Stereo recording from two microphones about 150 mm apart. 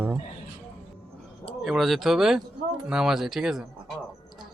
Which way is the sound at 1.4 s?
Centre (ahead or behind).